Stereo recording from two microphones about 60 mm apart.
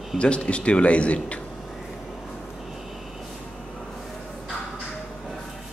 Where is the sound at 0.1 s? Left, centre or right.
Centre.